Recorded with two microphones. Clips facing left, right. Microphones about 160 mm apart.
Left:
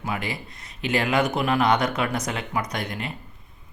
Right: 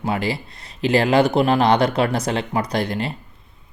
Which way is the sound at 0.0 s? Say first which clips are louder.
Right 7 dB; 30° right (ahead or behind).